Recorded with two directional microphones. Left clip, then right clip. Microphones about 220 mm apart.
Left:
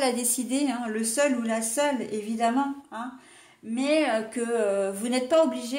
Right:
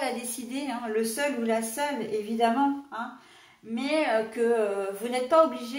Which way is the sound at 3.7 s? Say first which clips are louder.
Left 2 dB; 45° left (ahead or behind).